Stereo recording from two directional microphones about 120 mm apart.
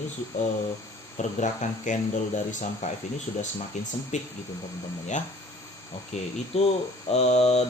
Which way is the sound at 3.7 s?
80° left.